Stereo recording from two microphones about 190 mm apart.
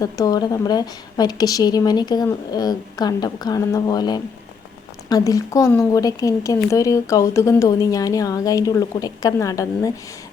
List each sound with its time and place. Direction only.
0.0 s a woman's voice: 20° left (ahead or behind)